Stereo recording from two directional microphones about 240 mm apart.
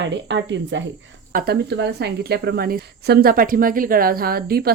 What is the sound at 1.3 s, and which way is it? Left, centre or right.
A woman's voice, right.